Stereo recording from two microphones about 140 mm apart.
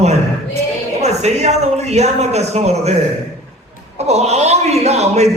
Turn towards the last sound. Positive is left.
turn(degrees=-50)  # may be behind; listen again after turning